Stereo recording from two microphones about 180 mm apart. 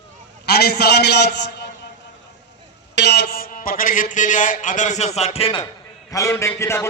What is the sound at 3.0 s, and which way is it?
A man's voice, 65° left (ahead or behind).